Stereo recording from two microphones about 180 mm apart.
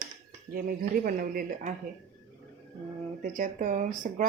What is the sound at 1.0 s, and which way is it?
Speech, 50° right (ahead or behind).